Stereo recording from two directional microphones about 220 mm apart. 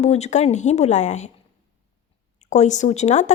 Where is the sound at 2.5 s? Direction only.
35° left (ahead or behind).